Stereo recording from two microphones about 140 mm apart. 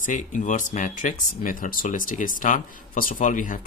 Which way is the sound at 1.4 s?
80° left.